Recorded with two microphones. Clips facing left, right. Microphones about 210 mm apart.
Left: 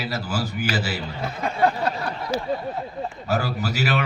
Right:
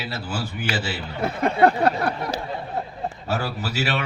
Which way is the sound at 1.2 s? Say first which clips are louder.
Right 5 dB; 60° right (ahead or behind).